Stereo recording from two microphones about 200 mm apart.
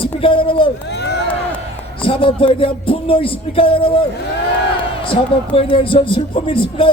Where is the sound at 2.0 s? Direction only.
25° left (ahead or behind).